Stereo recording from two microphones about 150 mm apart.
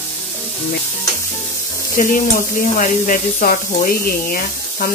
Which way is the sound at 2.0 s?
65° left (ahead or behind).